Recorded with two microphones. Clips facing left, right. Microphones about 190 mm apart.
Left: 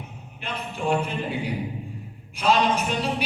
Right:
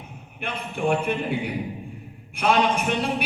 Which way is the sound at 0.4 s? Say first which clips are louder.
Right 2 dB; 60° right (ahead or behind).